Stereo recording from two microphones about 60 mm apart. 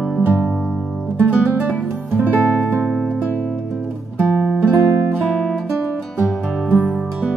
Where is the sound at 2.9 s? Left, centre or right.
Centre.